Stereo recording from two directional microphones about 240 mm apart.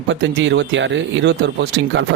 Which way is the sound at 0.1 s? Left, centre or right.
Right.